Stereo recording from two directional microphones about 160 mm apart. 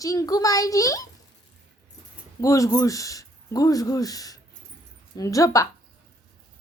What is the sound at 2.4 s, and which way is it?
Speech, 20° left (ahead or behind).